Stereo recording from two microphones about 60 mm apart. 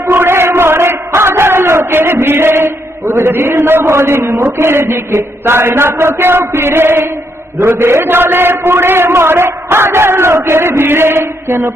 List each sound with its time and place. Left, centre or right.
0.1 s a man's voice: right